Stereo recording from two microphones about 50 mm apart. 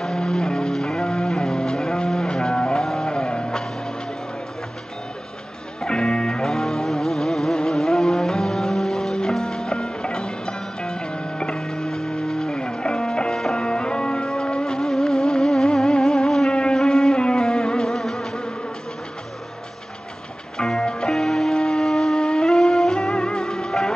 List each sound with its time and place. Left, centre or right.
0.0 s music: centre
5.8 s music: centre
20.5 s music: centre